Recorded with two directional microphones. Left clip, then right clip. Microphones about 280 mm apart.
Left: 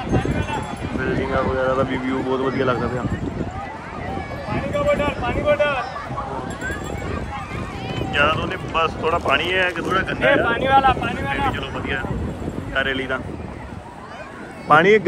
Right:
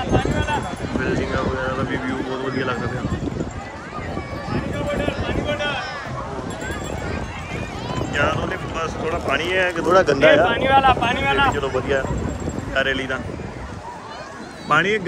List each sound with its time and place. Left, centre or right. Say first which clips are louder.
0.1 s run: right 2 dB; right
1.0 s speech: left 2 dB; centre
4.7 s a sound: left 6 dB; centre
8.1 s speech: left 3 dB; centre
12.7 s speech: right 1 dB; centre
14.7 s speech: left 5 dB; centre